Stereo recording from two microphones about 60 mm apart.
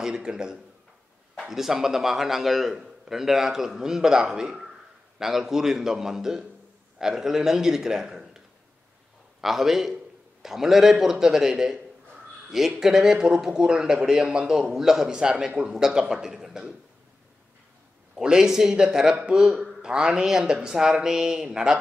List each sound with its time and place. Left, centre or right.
0.0 s a man's voice: centre
9.4 s a man's voice: centre
18.1 s a man's voice: centre